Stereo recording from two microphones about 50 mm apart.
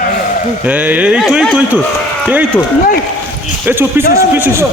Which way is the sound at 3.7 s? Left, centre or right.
Right.